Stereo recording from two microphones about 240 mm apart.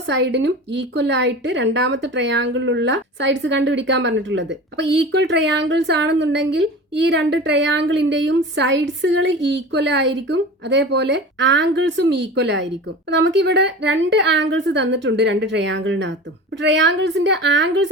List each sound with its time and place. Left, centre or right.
0.1 s a woman's voice: right